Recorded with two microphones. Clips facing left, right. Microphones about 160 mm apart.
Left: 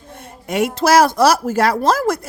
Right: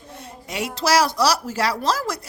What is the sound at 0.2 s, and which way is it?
A woman's voice, 55° left (ahead or behind).